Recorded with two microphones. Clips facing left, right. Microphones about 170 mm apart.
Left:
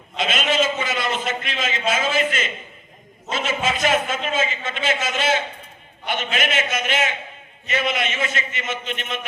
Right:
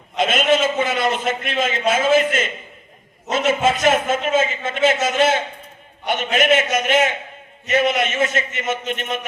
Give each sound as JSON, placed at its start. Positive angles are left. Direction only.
{"t": 0.2, "sound": "a man's voice", "side_deg": -50}